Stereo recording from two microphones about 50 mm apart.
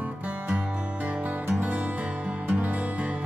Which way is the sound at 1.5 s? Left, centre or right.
Right.